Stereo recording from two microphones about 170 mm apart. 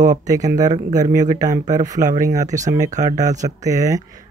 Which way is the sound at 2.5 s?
45° right (ahead or behind).